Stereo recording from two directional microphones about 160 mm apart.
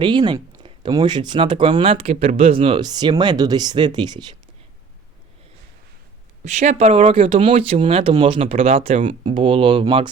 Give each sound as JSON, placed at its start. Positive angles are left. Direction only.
{"t": 0.0, "sound": "speech", "side_deg": -30}
{"t": 6.4, "sound": "speech", "side_deg": -45}